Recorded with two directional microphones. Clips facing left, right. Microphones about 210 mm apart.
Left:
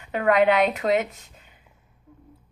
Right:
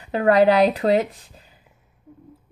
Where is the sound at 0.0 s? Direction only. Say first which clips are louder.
Right 4 dB; 35° right (ahead or behind).